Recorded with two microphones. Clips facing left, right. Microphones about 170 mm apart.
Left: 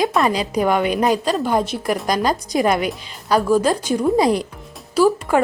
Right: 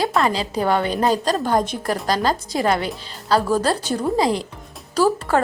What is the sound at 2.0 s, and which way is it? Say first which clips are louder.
Speech: left 1 dB; 15° left (ahead or behind).